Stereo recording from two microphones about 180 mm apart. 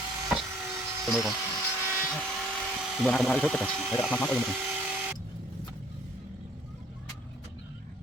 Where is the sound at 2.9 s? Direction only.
Centre (ahead or behind).